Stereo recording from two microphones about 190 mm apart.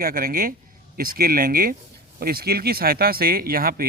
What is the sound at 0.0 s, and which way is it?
Speech, 50° right (ahead or behind).